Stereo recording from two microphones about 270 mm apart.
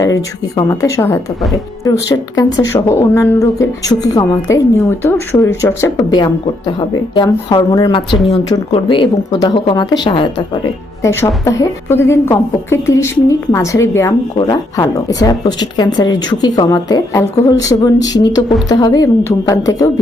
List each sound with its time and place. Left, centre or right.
0.0 s a woman's voice: centre